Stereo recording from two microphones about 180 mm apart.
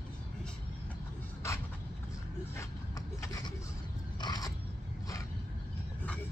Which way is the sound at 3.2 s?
20° left (ahead or behind).